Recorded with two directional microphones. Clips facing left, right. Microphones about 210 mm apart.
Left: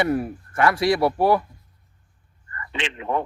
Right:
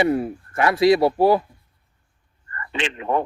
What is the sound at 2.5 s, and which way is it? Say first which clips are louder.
Speech: right 3 dB; 45° right (ahead or behind).